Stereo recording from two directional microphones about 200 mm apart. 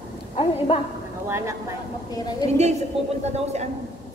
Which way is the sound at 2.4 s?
20° left (ahead or behind).